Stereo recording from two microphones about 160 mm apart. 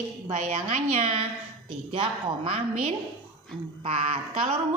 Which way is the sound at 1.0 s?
35° right (ahead or behind).